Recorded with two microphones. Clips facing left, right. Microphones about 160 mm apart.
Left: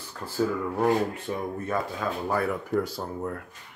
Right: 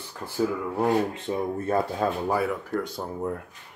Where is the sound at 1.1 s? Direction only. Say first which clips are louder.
Right 3 dB; 25° right (ahead or behind).